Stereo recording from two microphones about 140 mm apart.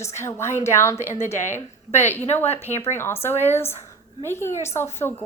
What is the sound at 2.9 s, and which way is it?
Speech, 15° left (ahead or behind).